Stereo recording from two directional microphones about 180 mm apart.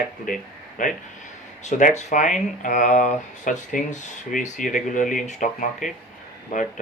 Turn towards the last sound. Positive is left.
turn(degrees=45)  # may be behind; listen again after turning